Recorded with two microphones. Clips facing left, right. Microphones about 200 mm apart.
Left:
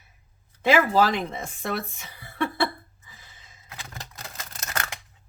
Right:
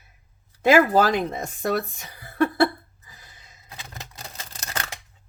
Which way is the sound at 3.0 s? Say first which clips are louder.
Right 1 dB; 40° right (ahead or behind).